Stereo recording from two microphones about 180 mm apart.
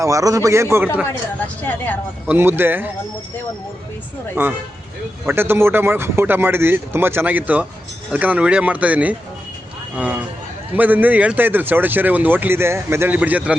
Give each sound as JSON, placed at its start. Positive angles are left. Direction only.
{"t": 0.0, "sound": "speech", "side_deg": -20}
{"t": 1.0, "sound": "speech", "side_deg": 10}
{"t": 2.2, "sound": "speech", "side_deg": -10}
{"t": 5.3, "sound": "speech", "side_deg": -10}
{"t": 10.8, "sound": "speech", "side_deg": -10}